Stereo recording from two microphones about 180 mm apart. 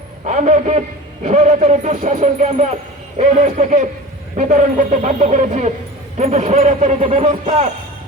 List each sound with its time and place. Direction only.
0.3 s speech: 40° right (ahead or behind)